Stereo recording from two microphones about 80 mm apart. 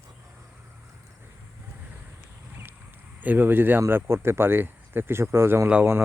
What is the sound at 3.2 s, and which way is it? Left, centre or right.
Speech, right.